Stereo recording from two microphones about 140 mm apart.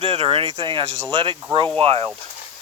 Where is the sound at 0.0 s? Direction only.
40° right (ahead or behind).